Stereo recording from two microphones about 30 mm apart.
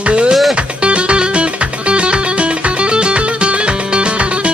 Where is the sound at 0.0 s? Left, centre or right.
Right.